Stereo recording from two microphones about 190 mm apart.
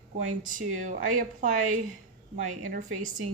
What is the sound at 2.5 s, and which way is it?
Speech, 40° right (ahead or behind).